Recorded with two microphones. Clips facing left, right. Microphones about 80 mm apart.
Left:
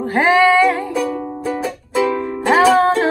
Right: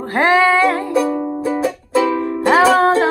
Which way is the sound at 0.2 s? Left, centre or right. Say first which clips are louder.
Even; centre.